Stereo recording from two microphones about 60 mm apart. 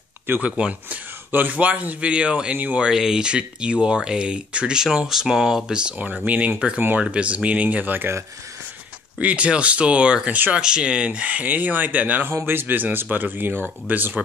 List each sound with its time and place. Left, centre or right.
0.4 s speech: centre
4.8 s speech: centre; by 8.1 s right
9.2 s speech: right